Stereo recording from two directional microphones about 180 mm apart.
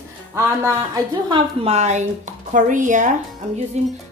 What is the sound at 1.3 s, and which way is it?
A woman's voice, 35° right (ahead or behind).